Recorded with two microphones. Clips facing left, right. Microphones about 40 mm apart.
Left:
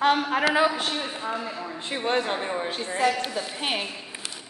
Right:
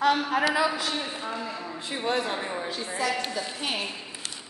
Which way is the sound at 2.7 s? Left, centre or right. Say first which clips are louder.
Left 5 dB; left.